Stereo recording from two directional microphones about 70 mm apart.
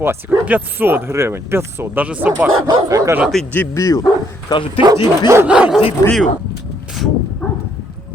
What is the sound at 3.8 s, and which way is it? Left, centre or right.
Speech, left.